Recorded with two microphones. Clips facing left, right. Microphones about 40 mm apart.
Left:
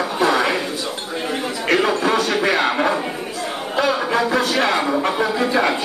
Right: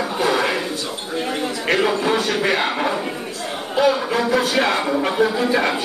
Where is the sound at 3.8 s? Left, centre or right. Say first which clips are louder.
Right 1 dB; centre.